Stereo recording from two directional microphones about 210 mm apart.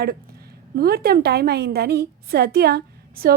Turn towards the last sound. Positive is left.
turn(degrees=-45)  # may be behind; listen again after turning